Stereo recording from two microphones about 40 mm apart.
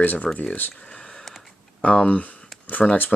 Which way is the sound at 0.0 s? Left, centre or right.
Left.